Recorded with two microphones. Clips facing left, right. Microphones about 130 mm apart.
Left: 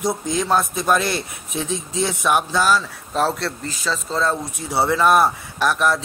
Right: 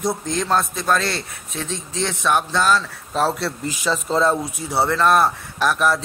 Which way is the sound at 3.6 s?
20° right (ahead or behind).